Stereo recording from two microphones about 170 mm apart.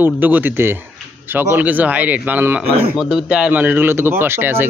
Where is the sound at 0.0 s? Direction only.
10° right (ahead or behind).